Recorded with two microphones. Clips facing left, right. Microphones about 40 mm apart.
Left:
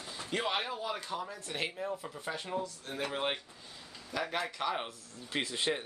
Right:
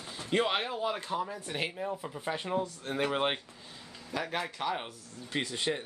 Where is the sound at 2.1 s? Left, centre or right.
Right.